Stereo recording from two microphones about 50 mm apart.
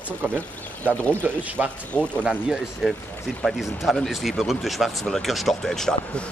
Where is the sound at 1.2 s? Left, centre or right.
Right.